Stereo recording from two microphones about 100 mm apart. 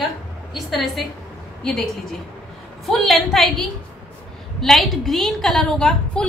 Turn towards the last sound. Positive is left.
turn(degrees=10)  # may be behind; listen again after turning